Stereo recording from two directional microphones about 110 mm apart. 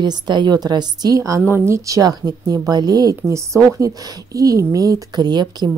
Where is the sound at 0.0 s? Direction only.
45° right (ahead or behind).